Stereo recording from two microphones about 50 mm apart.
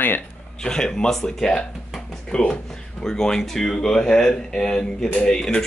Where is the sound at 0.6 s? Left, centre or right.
Centre.